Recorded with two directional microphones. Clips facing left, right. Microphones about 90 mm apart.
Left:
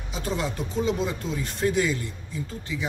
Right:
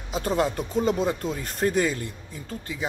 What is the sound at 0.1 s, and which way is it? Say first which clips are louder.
Speech: right 5 dB; 45° right (ahead or behind).